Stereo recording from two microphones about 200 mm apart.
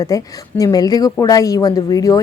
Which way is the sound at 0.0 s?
15° left (ahead or behind).